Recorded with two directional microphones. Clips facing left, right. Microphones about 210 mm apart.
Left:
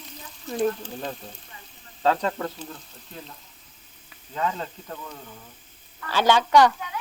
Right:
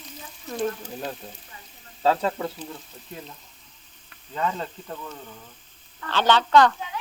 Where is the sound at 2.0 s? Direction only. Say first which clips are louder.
Right 1 dB; 5° right (ahead or behind).